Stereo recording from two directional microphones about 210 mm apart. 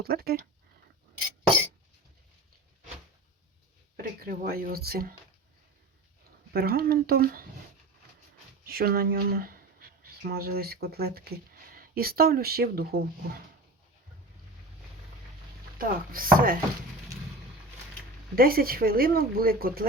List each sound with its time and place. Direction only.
0.0 s speech: 45° right (ahead or behind)
3.9 s speech: 45° right (ahead or behind)
6.5 s speech: 45° right (ahead or behind)
8.6 s speech: 45° right (ahead or behind)
15.8 s speech: 45° right (ahead or behind)
18.3 s speech: 45° right (ahead or behind)